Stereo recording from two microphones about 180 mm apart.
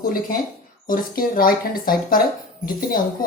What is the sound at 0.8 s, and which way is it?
Speech, 50° left (ahead or behind).